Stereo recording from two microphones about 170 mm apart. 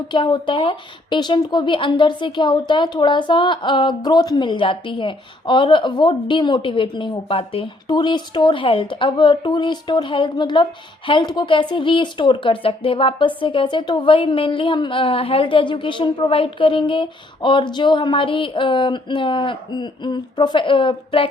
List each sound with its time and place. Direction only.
0.1 s a woman's voice: 30° left (ahead or behind)